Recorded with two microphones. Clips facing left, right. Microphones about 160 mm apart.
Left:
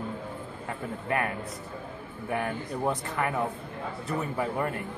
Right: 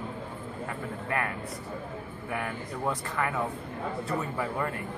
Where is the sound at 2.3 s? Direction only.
25° left (ahead or behind).